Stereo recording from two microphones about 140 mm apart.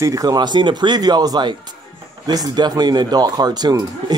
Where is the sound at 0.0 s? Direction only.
25° right (ahead or behind).